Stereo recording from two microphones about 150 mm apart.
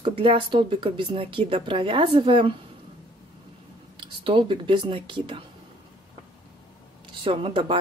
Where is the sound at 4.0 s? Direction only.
35° right (ahead or behind).